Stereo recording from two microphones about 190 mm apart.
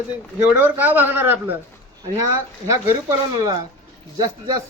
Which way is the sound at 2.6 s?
20° right (ahead or behind).